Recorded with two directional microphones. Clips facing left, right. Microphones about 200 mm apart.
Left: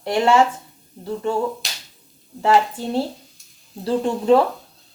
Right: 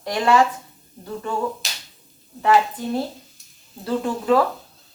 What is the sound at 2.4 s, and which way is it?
A woman's voice, 30° left (ahead or behind).